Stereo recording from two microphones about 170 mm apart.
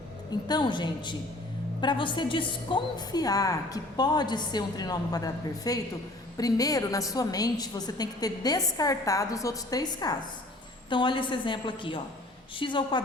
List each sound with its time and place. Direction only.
0.4 s a woman's voice: 25° left (ahead or behind)